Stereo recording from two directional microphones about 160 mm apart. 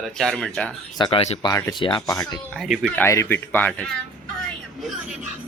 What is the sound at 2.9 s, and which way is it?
Speech, 15° left (ahead or behind).